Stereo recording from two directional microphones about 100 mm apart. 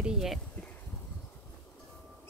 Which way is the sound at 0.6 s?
15° left (ahead or behind).